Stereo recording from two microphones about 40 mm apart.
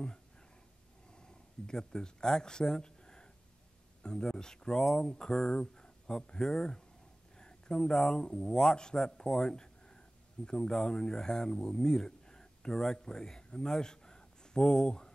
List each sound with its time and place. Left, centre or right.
1.2 s speech: centre